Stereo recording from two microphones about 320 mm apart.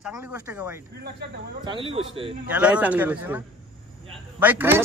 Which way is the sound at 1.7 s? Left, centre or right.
Centre.